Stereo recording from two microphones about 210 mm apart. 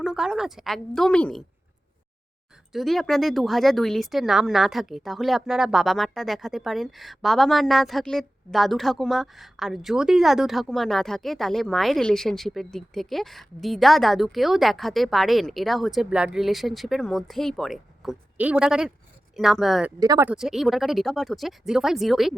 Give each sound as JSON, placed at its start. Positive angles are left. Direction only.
{"t": 0.0, "sound": "speech", "side_deg": 0}
{"t": 2.7, "sound": "speech", "side_deg": 0}
{"t": 20.0, "sound": "speech", "side_deg": -15}
{"t": 20.3, "sound": "speech", "side_deg": 0}